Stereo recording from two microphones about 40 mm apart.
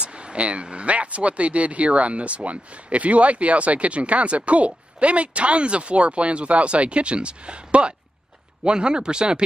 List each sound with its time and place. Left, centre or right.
0.0 s speech: right